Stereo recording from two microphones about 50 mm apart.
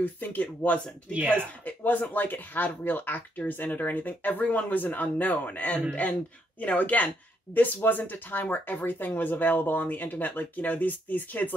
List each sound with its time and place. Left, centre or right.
0.0 s speech: left
1.1 s speech: right
1.7 s speech: left